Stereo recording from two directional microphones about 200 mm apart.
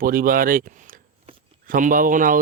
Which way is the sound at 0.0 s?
45° right (ahead or behind).